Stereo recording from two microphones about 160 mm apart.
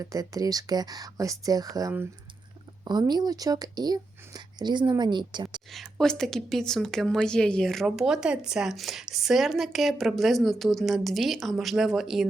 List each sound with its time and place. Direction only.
0.0 s speech: 20° right (ahead or behind)
5.7 s a woman's voice: centre (ahead or behind)